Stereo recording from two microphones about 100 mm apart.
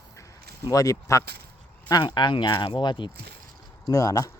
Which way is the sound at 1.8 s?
45° left (ahead or behind).